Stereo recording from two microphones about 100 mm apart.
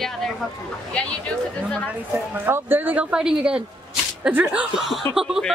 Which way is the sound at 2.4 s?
20° right (ahead or behind).